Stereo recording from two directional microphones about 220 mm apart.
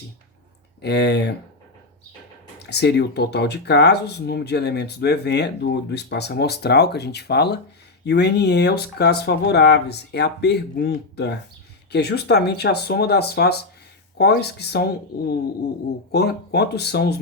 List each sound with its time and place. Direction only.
0.8 s speech: 50° left (ahead or behind)
2.6 s speech: 50° left (ahead or behind)